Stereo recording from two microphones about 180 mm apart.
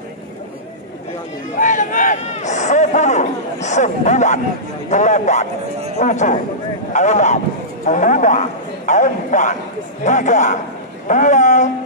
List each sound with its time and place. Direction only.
1.6 s a man's voice: 45° left (ahead or behind)